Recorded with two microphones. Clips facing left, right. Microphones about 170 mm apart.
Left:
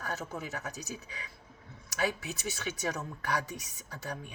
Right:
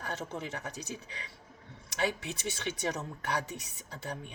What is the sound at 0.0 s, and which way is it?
Speech, 25° right (ahead or behind).